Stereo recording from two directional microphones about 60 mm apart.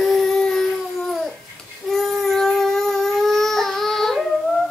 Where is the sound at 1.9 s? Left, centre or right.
Centre.